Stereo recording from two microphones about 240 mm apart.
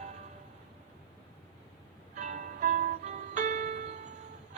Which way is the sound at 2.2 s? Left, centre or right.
Right.